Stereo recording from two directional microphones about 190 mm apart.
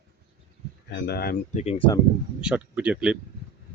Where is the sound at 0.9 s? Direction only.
55° left (ahead or behind).